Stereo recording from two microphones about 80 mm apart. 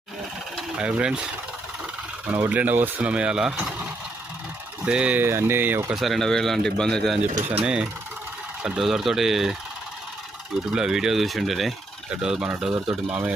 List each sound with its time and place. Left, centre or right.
0.8 s speech: centre
4.9 s speech: centre
5.2 s speech: right
5.9 s speech: centre
7.2 s speech: centre
10.7 s speech: centre